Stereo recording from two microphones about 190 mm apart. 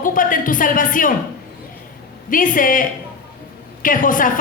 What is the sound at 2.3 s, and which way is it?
A woman's voice, 45° left (ahead or behind).